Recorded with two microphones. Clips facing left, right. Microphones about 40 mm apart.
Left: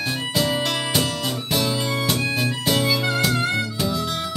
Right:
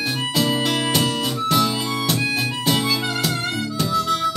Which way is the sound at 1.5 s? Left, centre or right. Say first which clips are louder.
Right 3 dB; centre.